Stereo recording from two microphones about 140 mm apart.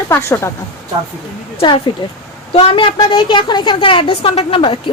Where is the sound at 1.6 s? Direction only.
35° left (ahead or behind).